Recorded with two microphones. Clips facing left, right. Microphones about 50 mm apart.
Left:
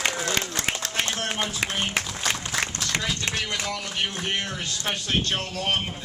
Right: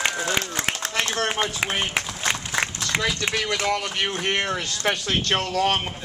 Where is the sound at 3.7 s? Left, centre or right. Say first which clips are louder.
Right 5 dB; right.